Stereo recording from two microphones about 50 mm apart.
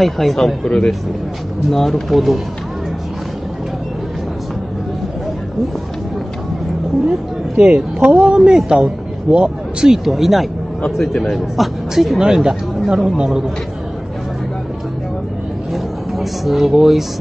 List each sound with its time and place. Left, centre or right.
0.0 s speech: centre
1.7 s speech: centre
7.1 s speech: centre
8.5 s a man's voice: centre
10.0 s a man's voice: centre
15.7 s a sound: centre